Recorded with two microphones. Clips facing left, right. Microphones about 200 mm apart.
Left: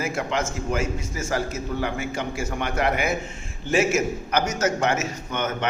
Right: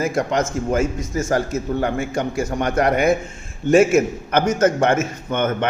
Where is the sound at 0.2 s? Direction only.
45° right (ahead or behind).